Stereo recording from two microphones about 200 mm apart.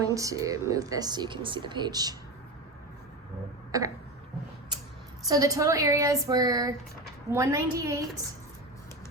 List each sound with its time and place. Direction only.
0.1 s speech: 15° right (ahead or behind)
3.7 s throat clearing: 15° right (ahead or behind)
5.3 s speech: 15° right (ahead or behind)